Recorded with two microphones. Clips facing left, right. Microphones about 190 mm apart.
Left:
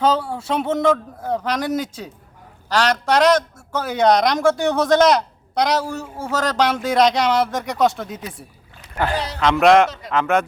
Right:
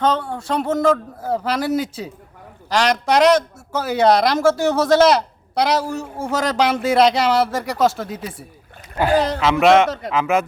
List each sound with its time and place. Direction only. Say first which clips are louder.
0.0 s a man's voice: left 1 dB; 5° left (ahead or behind)
9.1 s a man's voice: right 8 dB; 50° right (ahead or behind)
9.4 s a man's voice: left 3 dB; 5° right (ahead or behind)